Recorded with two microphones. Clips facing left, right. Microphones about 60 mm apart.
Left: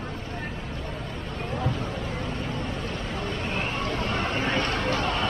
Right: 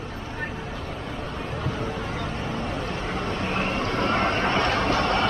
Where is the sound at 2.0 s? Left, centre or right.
Right.